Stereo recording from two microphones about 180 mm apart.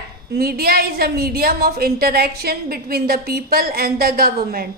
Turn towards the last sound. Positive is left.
turn(degrees=-55)  # may be behind; listen again after turning